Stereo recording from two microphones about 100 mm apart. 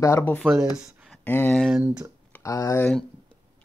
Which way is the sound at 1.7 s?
30° right (ahead or behind).